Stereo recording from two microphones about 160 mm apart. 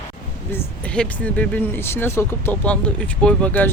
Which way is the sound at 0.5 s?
10° left (ahead or behind).